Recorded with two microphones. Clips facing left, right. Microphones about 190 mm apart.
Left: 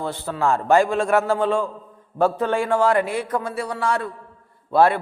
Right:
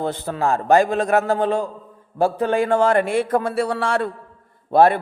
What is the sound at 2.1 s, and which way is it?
Speech, 20° left (ahead or behind).